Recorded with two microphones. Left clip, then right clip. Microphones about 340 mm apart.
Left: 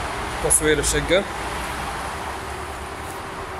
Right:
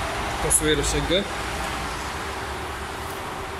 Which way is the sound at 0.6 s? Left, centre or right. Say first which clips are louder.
Left 3 dB; centre.